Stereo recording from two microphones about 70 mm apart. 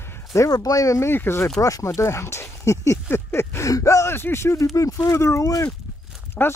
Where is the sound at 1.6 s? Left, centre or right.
Left.